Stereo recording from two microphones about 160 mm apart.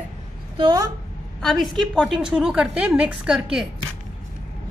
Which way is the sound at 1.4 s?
5° left (ahead or behind).